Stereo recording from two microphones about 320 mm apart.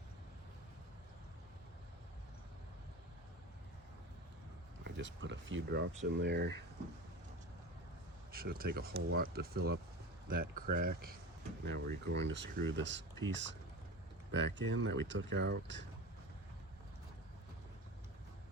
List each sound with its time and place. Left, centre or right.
4.8 s speech: right
8.3 s speech: right
12.0 s speech: right